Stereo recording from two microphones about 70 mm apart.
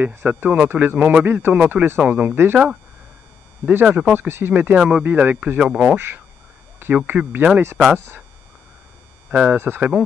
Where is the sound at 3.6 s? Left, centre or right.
Right.